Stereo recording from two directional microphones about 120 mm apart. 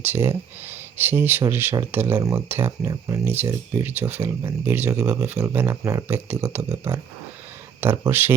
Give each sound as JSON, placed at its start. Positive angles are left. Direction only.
{"t": 0.0, "sound": "speech", "side_deg": -20}